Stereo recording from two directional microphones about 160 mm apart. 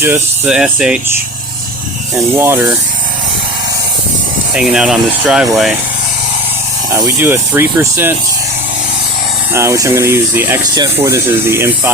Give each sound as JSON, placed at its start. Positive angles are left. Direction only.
{"t": 0.0, "sound": "speech", "side_deg": -10}
{"t": 2.4, "sound": "speech", "side_deg": -15}
{"t": 4.5, "sound": "speech", "side_deg": -5}
{"t": 6.9, "sound": "speech", "side_deg": -15}
{"t": 9.5, "sound": "speech", "side_deg": -15}